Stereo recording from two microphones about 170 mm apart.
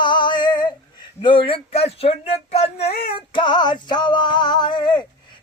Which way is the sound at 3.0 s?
35° left (ahead or behind).